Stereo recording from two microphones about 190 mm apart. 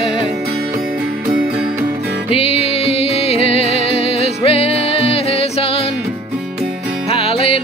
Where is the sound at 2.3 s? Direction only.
30° left (ahead or behind).